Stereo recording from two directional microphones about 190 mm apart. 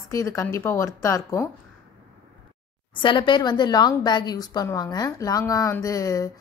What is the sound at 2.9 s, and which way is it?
Speech, 25° left (ahead or behind).